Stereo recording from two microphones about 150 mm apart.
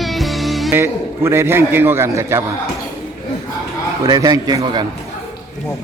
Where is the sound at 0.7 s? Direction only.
15° right (ahead or behind).